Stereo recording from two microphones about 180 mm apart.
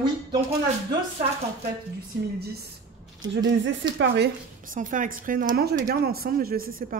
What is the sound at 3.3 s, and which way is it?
Speech, 90° right.